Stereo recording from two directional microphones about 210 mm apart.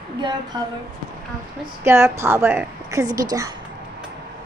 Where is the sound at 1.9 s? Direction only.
10° right (ahead or behind).